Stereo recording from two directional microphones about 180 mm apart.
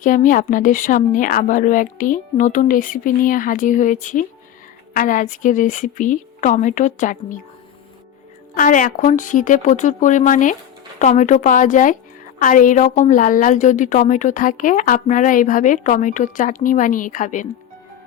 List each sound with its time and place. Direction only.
0.0 s a woman's voice: 45° left (ahead or behind)
8.5 s a woman's voice: 45° left (ahead or behind)